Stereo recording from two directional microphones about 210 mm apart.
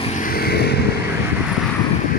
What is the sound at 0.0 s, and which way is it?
Vehicle, 35° left (ahead or behind).